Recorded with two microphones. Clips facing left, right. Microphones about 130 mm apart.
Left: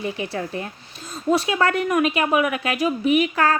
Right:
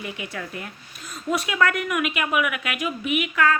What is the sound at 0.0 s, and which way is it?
A woman's voice, 30° left (ahead or behind).